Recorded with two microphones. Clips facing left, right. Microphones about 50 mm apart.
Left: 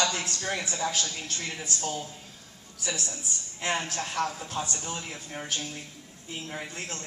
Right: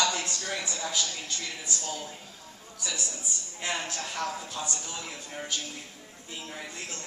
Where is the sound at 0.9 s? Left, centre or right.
Left.